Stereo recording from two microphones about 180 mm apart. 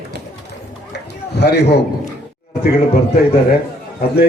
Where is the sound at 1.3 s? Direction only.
65° left (ahead or behind).